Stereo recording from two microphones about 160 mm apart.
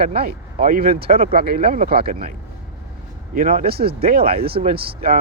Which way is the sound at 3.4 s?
60° right (ahead or behind).